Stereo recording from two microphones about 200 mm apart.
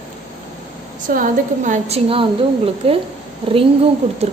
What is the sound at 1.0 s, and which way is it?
A woman's voice, 40° right (ahead or behind).